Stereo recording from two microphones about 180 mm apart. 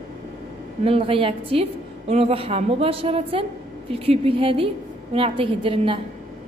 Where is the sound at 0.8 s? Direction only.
30° right (ahead or behind).